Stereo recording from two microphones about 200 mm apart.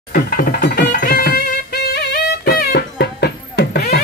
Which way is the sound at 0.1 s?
45° left (ahead or behind).